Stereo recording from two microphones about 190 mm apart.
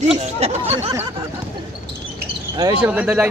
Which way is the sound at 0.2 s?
35° right (ahead or behind).